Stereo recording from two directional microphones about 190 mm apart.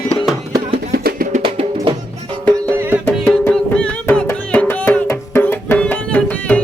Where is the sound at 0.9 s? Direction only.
50° right (ahead or behind).